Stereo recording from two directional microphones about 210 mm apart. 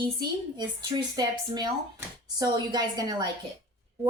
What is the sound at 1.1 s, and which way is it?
A woman's voice, 20° right (ahead or behind).